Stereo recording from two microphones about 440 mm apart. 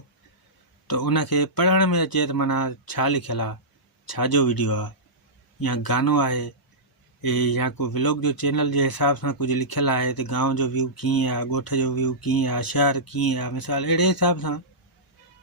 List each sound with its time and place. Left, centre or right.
0.9 s speech: left